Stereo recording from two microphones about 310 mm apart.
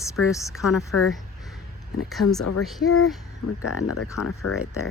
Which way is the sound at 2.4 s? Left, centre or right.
Left.